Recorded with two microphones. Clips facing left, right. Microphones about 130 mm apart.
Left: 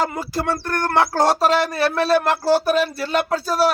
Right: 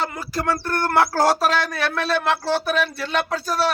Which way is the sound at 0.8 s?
20° left (ahead or behind).